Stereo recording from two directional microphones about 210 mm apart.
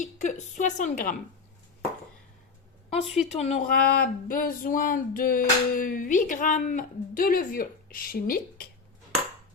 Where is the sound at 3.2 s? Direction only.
30° left (ahead or behind).